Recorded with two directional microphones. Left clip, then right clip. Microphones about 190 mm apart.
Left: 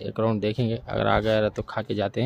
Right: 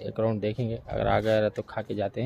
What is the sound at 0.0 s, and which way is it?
Speech, 15° left (ahead or behind).